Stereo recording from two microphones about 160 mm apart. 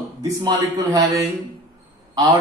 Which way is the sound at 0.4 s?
25° right (ahead or behind).